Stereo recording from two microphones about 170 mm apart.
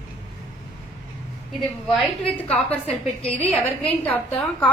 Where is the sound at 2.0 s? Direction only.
5° left (ahead or behind).